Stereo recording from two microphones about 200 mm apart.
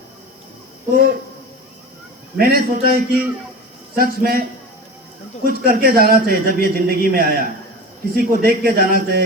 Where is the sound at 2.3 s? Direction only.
50° right (ahead or behind).